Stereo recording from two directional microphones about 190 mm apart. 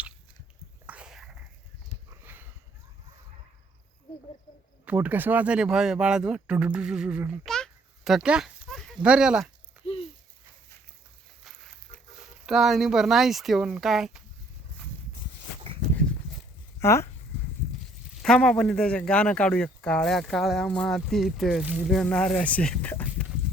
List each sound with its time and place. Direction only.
0.9 s dog: 5° right (ahead or behind)
2.0 s sniff: 10° right (ahead or behind)
4.9 s a man's voice: 10° right (ahead or behind)
9.8 s a sound: 30° left (ahead or behind)
11.4 s speech: centre (ahead or behind)
16.8 s speech: 15° left (ahead or behind)
18.2 s a man's voice: 5° left (ahead or behind)